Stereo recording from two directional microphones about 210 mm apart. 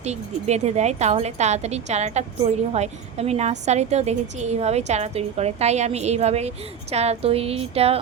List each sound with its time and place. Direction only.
0.0 s a woman's voice: 30° right (ahead or behind)